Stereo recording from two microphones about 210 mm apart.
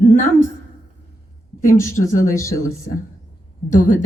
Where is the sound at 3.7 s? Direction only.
40° left (ahead or behind).